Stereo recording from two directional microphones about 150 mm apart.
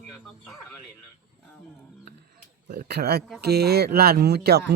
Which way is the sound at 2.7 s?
90° right.